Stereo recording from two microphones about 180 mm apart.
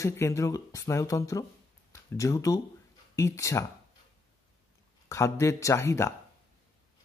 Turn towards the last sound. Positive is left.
turn(degrees=15)  # may be behind; listen again after turning